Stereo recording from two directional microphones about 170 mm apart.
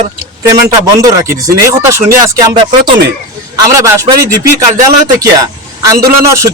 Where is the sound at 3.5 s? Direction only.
20° right (ahead or behind).